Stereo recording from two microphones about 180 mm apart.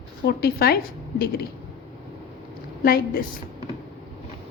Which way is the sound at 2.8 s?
55° left (ahead or behind).